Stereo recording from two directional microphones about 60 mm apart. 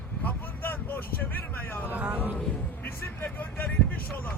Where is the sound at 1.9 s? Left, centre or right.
Right.